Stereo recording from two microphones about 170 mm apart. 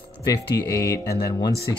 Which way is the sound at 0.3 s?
20° left (ahead or behind).